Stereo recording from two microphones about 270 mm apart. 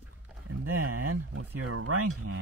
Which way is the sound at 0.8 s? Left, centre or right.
Right.